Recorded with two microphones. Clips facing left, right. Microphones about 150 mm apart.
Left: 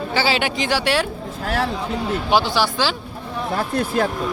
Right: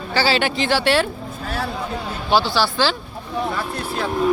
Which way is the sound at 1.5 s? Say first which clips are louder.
Left 4 dB; 90° left.